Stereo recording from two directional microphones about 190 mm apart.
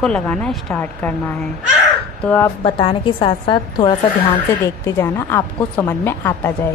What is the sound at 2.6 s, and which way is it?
A woman's voice, 25° left (ahead or behind).